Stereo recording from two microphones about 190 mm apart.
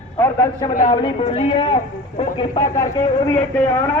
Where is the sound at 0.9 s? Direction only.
30° left (ahead or behind).